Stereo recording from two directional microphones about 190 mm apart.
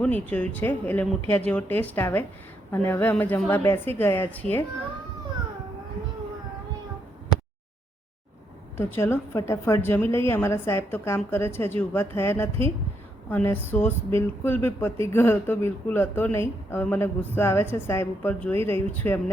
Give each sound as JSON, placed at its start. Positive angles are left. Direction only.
{"t": 0.0, "sound": "speech", "side_deg": 10}
{"t": 8.8, "sound": "speech", "side_deg": 10}